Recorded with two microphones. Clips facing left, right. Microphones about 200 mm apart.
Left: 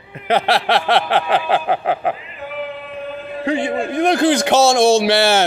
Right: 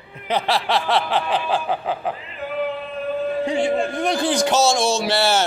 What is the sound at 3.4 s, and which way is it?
A man's voice, 60° left (ahead or behind).